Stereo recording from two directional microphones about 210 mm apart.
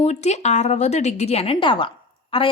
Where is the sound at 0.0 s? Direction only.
30° left (ahead or behind).